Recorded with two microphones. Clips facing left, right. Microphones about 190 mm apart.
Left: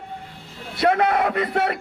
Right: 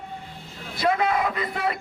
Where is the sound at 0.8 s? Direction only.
65° left (ahead or behind).